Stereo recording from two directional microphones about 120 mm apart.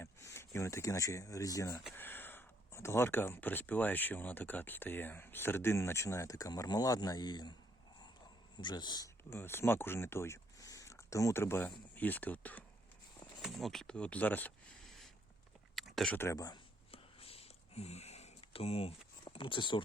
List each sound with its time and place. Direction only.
0.0 s speech: 25° left (ahead or behind)
1.9 s speech: 15° left (ahead or behind); by 7.5 s 35° left (ahead or behind)
8.5 s a man's voice: 40° left (ahead or behind)
9.3 s speech: 20° left (ahead or behind)
13.4 s speech: centre (ahead or behind)
14.8 s a sound: centre (ahead or behind)
16.1 s speech: 25° left (ahead or behind)
16.9 s a sound: 55° left (ahead or behind)
19.2 s speech: 45° left (ahead or behind)